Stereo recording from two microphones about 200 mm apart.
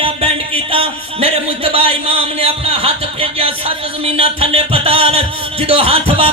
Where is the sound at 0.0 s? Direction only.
30° right (ahead or behind).